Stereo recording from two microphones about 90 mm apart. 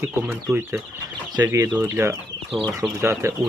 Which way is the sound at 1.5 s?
35° right (ahead or behind).